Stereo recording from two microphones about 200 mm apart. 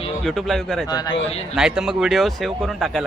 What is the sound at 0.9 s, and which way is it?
Speech, 20° left (ahead or behind).